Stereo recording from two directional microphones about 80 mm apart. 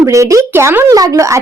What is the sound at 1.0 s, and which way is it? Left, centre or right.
Speech, right.